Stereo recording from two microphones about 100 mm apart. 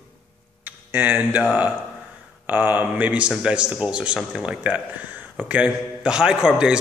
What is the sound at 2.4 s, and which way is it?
Speech, 15° right (ahead or behind).